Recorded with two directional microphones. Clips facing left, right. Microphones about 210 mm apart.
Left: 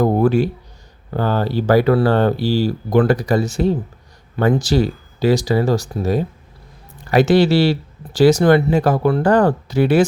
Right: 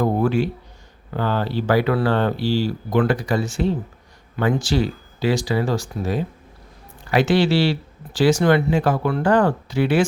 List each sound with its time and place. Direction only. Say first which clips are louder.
0.0 s speech: left 4 dB; 40° left (ahead or behind)